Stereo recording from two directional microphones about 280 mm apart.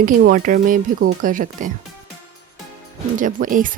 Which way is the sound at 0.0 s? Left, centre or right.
Right.